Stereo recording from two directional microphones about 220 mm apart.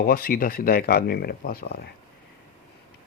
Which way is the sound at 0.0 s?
40° left (ahead or behind).